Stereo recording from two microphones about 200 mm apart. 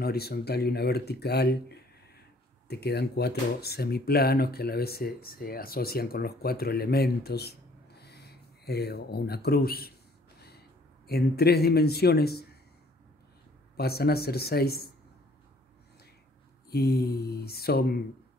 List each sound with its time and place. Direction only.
0.0 s speech: 50° left (ahead or behind)
13.7 s speech: 50° left (ahead or behind)
16.7 s speech: 50° left (ahead or behind)